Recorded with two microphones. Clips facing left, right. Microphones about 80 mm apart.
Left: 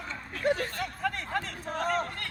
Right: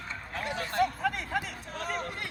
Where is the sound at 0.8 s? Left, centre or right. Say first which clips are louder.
Right 4 dB; centre.